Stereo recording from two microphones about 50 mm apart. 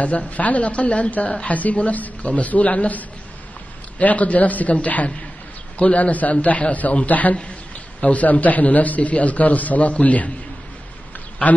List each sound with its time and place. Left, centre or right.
0.0 s a woman's voice: left